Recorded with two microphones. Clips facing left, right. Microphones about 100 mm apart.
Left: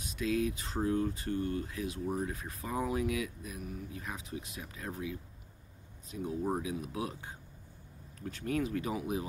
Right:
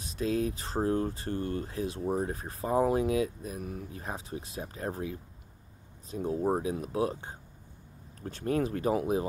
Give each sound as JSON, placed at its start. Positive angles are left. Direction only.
{"t": 0.0, "sound": "speech", "side_deg": -35}
{"t": 3.6, "sound": "speech", "side_deg": -50}
{"t": 4.0, "sound": "speech", "side_deg": -35}